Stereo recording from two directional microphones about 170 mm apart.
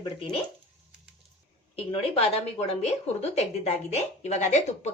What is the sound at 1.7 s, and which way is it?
A woman's voice, 35° left (ahead or behind).